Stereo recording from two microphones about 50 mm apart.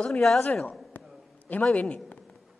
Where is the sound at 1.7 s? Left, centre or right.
Left.